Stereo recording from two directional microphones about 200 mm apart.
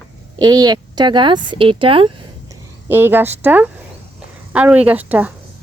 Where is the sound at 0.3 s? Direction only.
20° right (ahead or behind).